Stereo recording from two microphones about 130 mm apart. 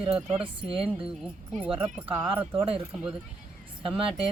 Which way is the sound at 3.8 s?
40° right (ahead or behind).